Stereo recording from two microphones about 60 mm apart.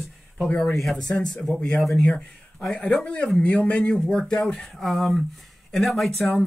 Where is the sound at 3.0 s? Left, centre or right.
Centre.